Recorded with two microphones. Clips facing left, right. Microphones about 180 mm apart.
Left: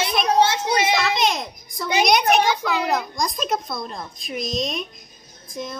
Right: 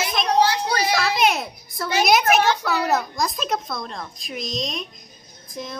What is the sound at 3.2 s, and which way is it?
A woman's voice, centre (ahead or behind).